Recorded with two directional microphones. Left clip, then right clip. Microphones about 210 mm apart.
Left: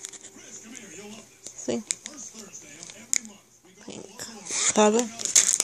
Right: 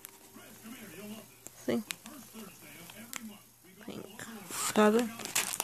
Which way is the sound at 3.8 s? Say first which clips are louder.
Left 5 dB; centre (ahead or behind).